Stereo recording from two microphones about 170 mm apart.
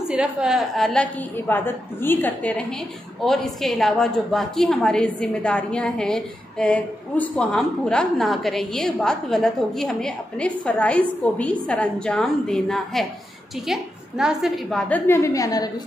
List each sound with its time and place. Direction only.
0.1 s a woman's voice: 5° right (ahead or behind)
1.5 s a woman's voice: 10° left (ahead or behind)
15.0 s a woman's voice: 15° left (ahead or behind)